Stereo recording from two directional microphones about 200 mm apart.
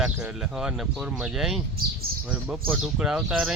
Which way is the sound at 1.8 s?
50° right (ahead or behind).